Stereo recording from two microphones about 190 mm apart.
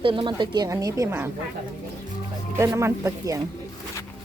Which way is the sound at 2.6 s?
15° right (ahead or behind).